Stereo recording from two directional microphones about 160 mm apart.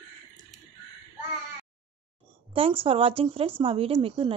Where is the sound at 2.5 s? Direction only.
35° right (ahead or behind).